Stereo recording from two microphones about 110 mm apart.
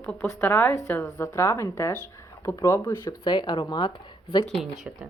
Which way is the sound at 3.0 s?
45° left (ahead or behind).